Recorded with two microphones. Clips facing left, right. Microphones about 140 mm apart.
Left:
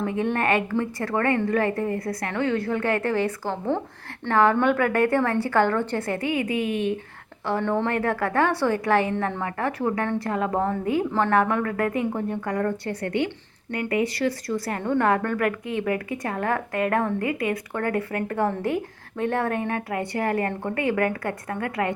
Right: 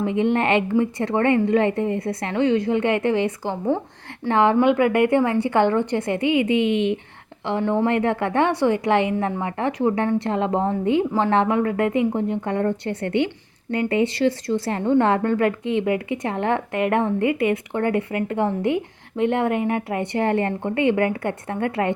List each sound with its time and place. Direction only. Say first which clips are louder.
0.0 s a woman's voice: right 4 dB; 20° right (ahead or behind)